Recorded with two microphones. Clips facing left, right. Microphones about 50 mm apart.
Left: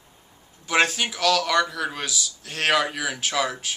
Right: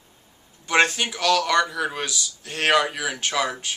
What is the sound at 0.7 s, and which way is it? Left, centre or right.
Speech, centre.